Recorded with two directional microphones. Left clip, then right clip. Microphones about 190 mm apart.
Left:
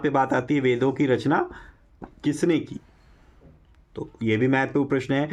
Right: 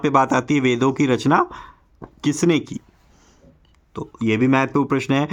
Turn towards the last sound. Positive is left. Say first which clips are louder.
# right 4 dB
turn(degrees=-40)  # may be behind; listen again after turning